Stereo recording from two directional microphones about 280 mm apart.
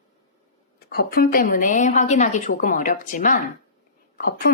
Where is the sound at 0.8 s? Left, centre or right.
Left.